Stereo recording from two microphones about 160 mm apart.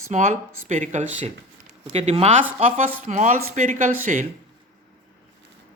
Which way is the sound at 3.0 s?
50° right (ahead or behind).